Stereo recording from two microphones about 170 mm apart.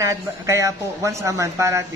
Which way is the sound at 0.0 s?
20° right (ahead or behind).